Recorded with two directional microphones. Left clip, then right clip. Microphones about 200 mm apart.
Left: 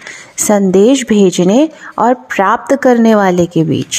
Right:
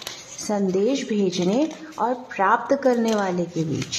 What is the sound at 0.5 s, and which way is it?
Speech, 50° left (ahead or behind).